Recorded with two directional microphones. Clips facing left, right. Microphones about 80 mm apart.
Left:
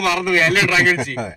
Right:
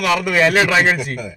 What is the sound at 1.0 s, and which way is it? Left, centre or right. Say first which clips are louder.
Speech: left 2 dB; left.